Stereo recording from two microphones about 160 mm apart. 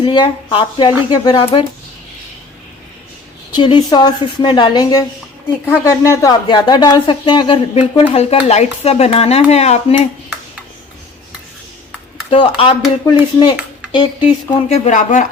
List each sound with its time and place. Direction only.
0.0 s speech: 30° left (ahead or behind)
3.5 s speech: 25° left (ahead or behind)
12.3 s speech: 35° left (ahead or behind)
14.7 s speech: 50° left (ahead or behind)